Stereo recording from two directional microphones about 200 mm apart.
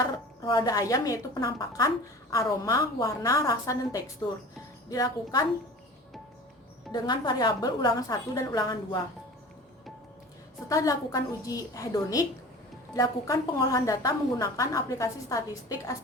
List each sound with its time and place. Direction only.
0.4 s a woman's voice: 20° left (ahead or behind)
6.9 s a woman's voice: 20° left (ahead or behind)
10.7 s a woman's voice: 15° left (ahead or behind)